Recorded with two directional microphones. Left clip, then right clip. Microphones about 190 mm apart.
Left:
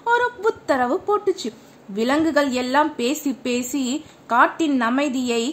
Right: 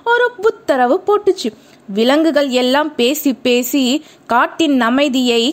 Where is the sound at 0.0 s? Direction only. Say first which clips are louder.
Right 6 dB; 40° right (ahead or behind).